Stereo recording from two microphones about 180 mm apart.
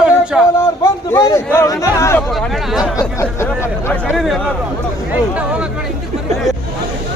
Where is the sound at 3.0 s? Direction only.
15° left (ahead or behind).